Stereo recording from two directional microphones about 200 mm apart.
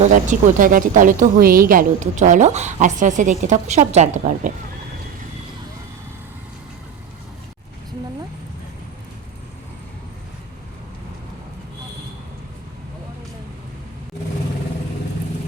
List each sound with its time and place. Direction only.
0.0 s speech: 40° right (ahead or behind)